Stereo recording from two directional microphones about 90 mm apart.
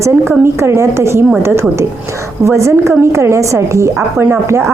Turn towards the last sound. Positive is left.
turn(degrees=-30)  # may be behind; listen again after turning